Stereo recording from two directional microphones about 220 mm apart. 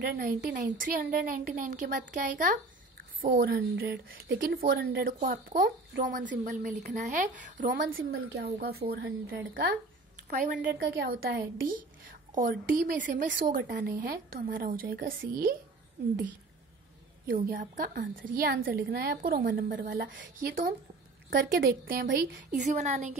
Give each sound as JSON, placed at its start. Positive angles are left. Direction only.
{"t": 0.0, "sound": "a woman's voice", "side_deg": -40}
{"t": 10.3, "sound": "a woman's voice", "side_deg": -35}
{"t": 17.3, "sound": "a woman's voice", "side_deg": -40}
{"t": 22.0, "sound": "a woman's voice", "side_deg": -55}
{"t": 22.5, "sound": "a woman's voice", "side_deg": -35}